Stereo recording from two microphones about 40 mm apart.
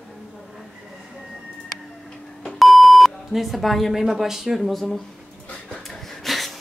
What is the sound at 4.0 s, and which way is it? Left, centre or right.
Speech, centre.